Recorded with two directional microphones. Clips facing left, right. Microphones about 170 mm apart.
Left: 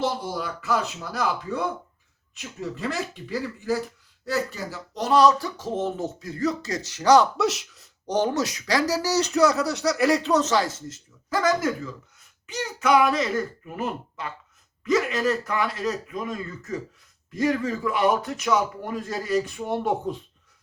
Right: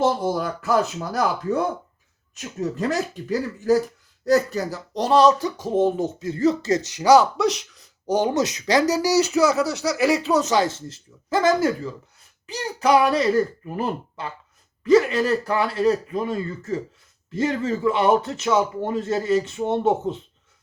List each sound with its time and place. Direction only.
0.0 s speech: 50° right (ahead or behind); by 8.1 s centre (ahead or behind)
8.1 s speech: 15° right (ahead or behind)
10.5 s speech: 25° right (ahead or behind)